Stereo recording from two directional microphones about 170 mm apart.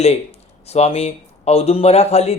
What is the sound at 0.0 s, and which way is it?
Speech, 40° left (ahead or behind).